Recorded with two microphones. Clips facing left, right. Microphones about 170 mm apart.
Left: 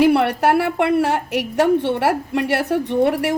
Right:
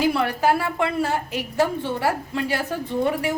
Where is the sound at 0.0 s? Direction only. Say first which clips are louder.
Left 6 dB; 65° left (ahead or behind).